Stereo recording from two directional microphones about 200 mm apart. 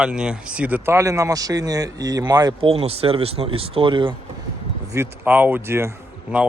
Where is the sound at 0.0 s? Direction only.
5° right (ahead or behind); by 4.1 s 25° right (ahead or behind).